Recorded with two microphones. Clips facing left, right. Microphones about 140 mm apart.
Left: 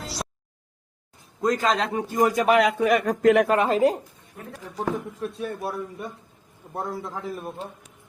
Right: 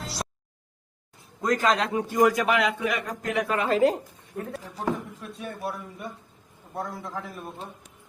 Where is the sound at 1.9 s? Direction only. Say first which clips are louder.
Right 1 dB; 40° left (ahead or behind).